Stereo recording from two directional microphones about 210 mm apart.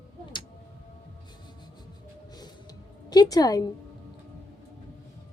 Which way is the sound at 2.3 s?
20° left (ahead or behind).